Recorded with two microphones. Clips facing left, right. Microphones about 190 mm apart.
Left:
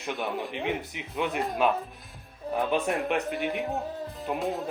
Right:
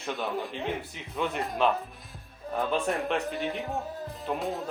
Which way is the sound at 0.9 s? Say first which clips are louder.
Left 1 dB; 15° left (ahead or behind).